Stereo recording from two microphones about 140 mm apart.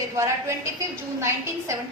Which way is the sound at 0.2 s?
20° right (ahead or behind).